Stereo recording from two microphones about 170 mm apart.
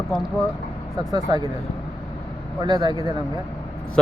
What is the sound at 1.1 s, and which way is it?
Speech, 25° right (ahead or behind).